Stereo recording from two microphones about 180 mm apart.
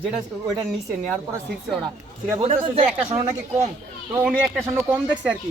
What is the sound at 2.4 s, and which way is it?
Speech, 35° right (ahead or behind).